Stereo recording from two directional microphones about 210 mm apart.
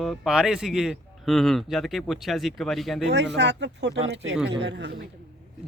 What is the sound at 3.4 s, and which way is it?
Speech, 55° right (ahead or behind).